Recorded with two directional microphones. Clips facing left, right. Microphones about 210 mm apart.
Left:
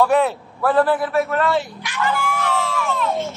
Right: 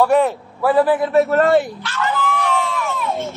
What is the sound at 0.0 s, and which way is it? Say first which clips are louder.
Speech: right 2 dB; 10° right (ahead or behind).